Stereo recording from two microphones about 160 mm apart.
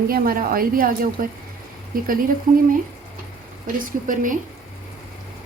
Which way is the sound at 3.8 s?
55° right (ahead or behind).